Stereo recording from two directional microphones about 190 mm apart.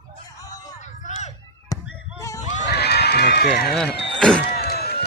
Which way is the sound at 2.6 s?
60° left (ahead or behind).